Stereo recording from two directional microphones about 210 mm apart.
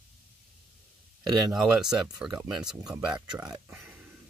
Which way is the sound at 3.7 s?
10° right (ahead or behind).